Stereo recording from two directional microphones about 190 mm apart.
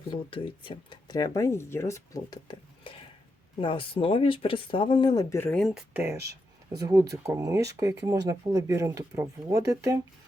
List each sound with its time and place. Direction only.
0.1 s speech: 30° left (ahead or behind); by 5.6 s 10° left (ahead or behind)
5.6 s speech: 5° right (ahead or behind)